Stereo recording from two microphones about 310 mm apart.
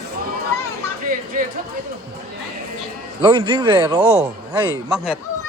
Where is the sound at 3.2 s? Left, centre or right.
Centre.